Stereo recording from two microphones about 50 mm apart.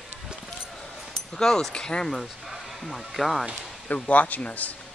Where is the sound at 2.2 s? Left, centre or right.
Centre.